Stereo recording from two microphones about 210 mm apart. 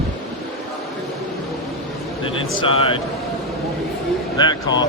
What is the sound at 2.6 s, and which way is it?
Speech, 25° left (ahead or behind).